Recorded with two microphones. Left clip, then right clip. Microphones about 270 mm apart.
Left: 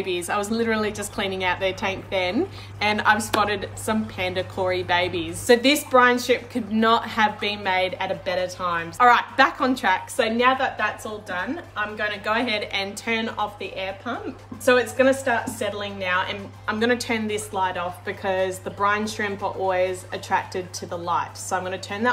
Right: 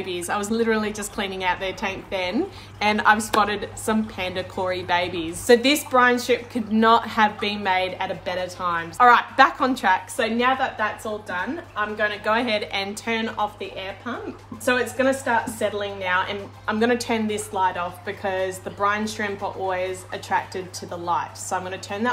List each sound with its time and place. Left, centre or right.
0.0 s a woman's voice: centre